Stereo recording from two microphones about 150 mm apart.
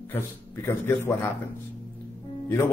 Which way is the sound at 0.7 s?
15° left (ahead or behind).